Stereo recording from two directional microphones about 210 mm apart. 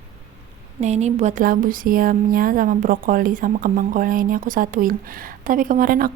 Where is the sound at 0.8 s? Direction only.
35° right (ahead or behind).